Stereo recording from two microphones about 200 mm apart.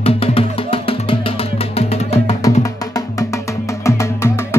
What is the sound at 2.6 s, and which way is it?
Music, 15° left (ahead or behind).